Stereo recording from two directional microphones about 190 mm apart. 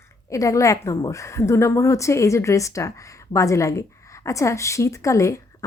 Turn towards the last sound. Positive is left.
turn(degrees=15)  # may be behind; listen again after turning